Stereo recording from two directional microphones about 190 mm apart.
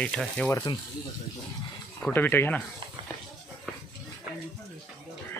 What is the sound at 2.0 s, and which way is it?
Speech, 10° left (ahead or behind).